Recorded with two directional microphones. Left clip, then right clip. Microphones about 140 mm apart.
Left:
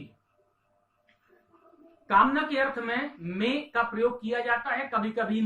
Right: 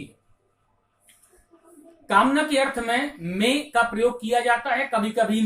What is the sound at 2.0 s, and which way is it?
Speech, 15° right (ahead or behind).